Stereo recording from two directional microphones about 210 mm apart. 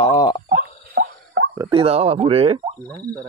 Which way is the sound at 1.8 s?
30° right (ahead or behind).